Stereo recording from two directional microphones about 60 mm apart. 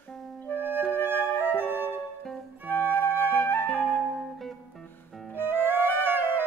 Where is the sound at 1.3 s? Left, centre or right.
Left.